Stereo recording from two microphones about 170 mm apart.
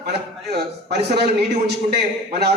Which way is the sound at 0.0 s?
75° right (ahead or behind).